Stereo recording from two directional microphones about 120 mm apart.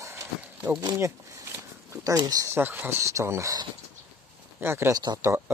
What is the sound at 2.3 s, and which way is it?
Speech, 25° right (ahead or behind).